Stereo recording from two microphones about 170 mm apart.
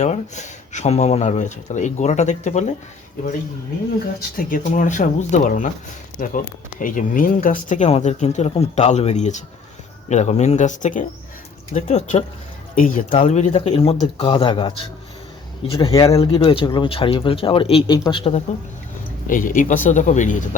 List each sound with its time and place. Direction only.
0.0 s speech: 45° left (ahead or behind)
4.4 s speech: 50° left (ahead or behind); by 16.0 s 25° left (ahead or behind)
16.0 s speech: 35° left (ahead or behind)
19.3 s speech: 50° left (ahead or behind)